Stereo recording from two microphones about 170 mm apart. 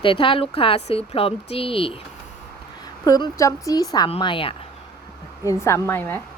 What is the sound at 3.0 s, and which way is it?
A woman's voice, 20° left (ahead or behind).